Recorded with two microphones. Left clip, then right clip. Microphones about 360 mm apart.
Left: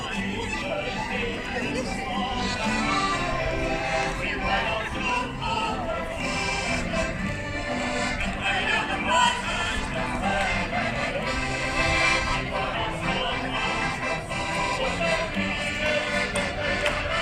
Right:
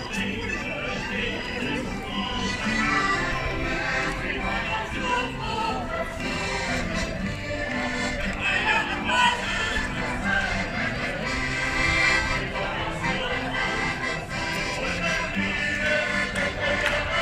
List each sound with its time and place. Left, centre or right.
2.8 s music: centre
8.4 s a sound: centre
11.8 s music: centre